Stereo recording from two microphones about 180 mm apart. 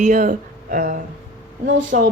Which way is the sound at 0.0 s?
45° right (ahead or behind).